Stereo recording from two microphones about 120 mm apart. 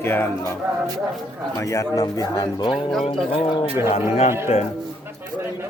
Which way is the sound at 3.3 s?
50° left (ahead or behind).